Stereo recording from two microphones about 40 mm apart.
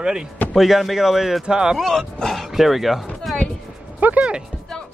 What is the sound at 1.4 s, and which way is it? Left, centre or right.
Speech, centre.